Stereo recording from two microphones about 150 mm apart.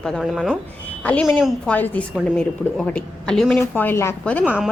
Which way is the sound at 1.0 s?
10° left (ahead or behind).